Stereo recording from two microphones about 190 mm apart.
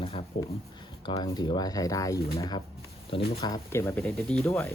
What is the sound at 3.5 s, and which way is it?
Speech, 15° left (ahead or behind).